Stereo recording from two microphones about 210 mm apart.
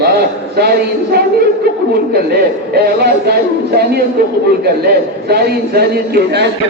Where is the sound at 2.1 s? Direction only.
50° right (ahead or behind).